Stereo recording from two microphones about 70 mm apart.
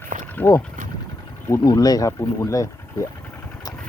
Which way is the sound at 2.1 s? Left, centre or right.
Left.